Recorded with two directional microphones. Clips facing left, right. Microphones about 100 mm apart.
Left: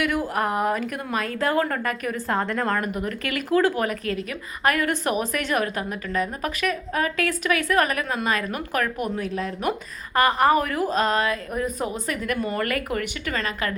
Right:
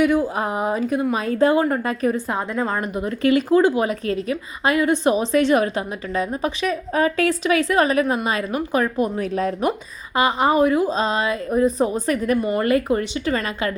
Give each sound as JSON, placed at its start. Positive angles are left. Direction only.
{"t": 0.3, "sound": "speech", "side_deg": -20}
{"t": 1.5, "sound": "speech", "side_deg": -15}
{"t": 2.2, "sound": "a woman's voice", "side_deg": -10}
{"t": 2.8, "sound": "speech", "side_deg": -25}
{"t": 10.2, "sound": "speech", "side_deg": -20}